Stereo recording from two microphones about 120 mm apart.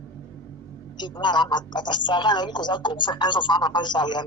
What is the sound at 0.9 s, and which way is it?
Speech, 40° left (ahead or behind).